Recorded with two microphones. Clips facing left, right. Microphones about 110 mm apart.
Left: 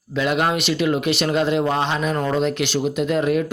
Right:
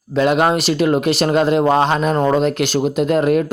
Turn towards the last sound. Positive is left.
turn(degrees=-45)  # may be behind; listen again after turning